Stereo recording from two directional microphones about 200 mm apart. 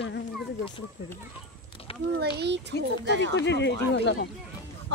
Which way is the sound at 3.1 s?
60° left (ahead or behind).